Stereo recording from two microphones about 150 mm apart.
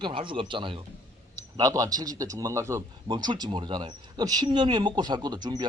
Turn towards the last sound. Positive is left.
turn(degrees=-30)  # may be behind; listen again after turning